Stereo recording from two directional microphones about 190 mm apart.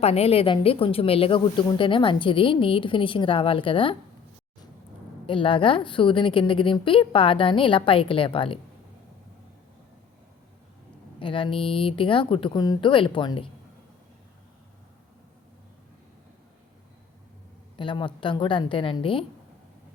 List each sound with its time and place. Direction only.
0.0 s a woman's voice: 30° left (ahead or behind)
5.2 s a woman's voice: 25° left (ahead or behind)
11.2 s a woman's voice: 25° left (ahead or behind)
17.7 s a woman's voice: 25° left (ahead or behind)